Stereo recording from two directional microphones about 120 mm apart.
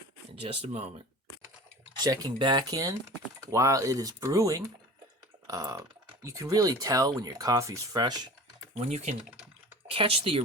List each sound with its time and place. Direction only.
0.4 s speech: 55° right (ahead or behind)
2.0 s speech: 35° right (ahead or behind)
8.8 s speech: 65° right (ahead or behind)
9.9 s speech: 50° right (ahead or behind)